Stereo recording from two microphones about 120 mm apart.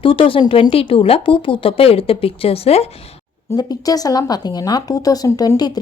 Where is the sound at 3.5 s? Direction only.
30° left (ahead or behind).